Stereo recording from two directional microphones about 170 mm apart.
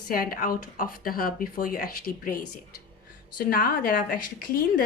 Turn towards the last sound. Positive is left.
turn(degrees=60)  # may be behind; listen again after turning